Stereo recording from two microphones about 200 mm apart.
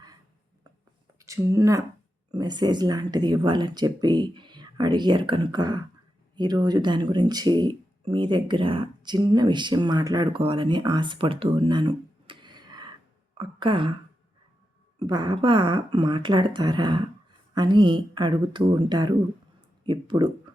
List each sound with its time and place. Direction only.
1.2 s a woman's voice: 15° right (ahead or behind)
14.9 s speech: 20° right (ahead or behind)